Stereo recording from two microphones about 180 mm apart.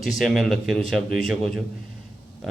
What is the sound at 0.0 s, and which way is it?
Speech, centre (ahead or behind).